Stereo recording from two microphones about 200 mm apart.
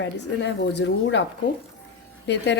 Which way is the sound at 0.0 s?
60° left (ahead or behind).